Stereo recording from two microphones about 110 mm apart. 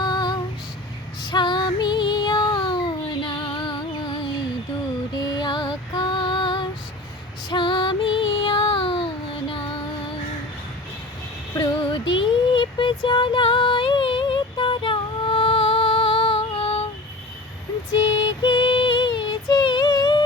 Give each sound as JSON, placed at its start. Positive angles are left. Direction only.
{"t": 0.0, "sound": "female singing", "side_deg": 40}
{"t": 1.2, "sound": "child singing", "side_deg": 40}
{"t": 5.1, "sound": "female singing", "side_deg": 40}
{"t": 7.5, "sound": "child singing", "side_deg": 50}
{"t": 11.8, "sound": "music", "side_deg": 45}
{"t": 18.3, "sound": "music", "side_deg": 45}